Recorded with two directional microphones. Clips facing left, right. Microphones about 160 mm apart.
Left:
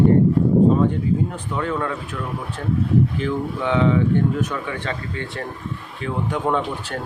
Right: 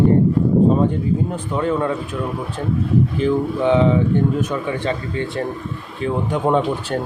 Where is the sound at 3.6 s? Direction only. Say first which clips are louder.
Right 2 dB; 30° right (ahead or behind).